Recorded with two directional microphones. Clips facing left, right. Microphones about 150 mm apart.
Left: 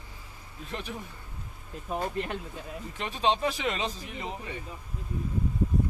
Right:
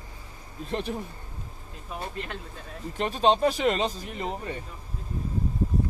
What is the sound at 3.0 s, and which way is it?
Speech, 40° right (ahead or behind).